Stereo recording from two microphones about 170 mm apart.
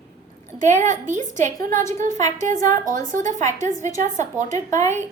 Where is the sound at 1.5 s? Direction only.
15° left (ahead or behind).